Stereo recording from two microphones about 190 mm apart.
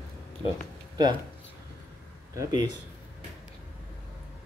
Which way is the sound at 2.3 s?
20° right (ahead or behind).